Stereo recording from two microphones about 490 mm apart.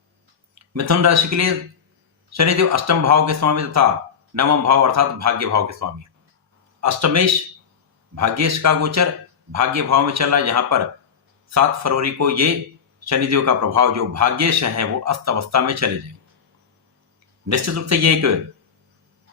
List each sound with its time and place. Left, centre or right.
0.6 s a man's voice: right
17.4 s a man's voice: right